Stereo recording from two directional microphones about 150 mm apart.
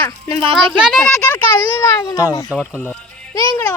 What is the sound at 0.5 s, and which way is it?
Speech, 5° right (ahead or behind).